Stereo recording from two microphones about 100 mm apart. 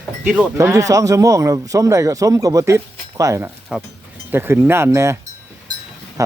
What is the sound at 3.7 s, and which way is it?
Speech, 10° right (ahead or behind).